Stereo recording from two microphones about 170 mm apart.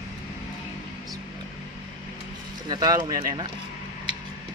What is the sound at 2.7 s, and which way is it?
Speech, 25° right (ahead or behind).